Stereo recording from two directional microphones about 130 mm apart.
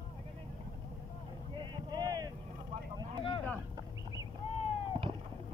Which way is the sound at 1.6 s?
35° right (ahead or behind).